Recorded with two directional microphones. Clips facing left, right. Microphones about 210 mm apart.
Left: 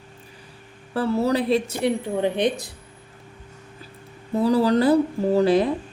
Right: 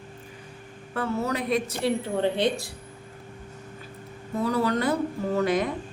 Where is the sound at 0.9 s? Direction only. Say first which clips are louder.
Left 6 dB; 35° left (ahead or behind).